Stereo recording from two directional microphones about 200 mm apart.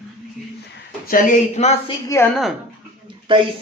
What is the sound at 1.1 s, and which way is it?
Speech, 40° left (ahead or behind).